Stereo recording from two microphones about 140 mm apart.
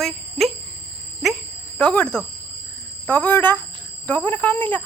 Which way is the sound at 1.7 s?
10° left (ahead or behind).